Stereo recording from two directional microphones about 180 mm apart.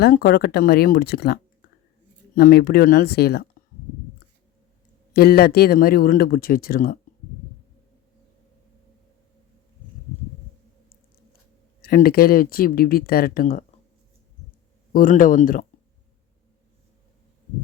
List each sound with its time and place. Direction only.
0.0 s speech: 55° left (ahead or behind)
5.1 s speech: 60° left (ahead or behind)
11.8 s speech: 55° left (ahead or behind)
14.9 s speech: 50° left (ahead or behind)